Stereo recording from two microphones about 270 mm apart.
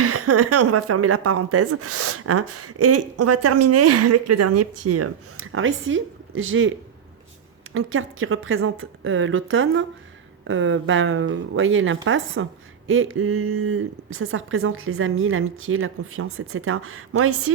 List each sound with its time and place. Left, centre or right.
0.0 s speech: right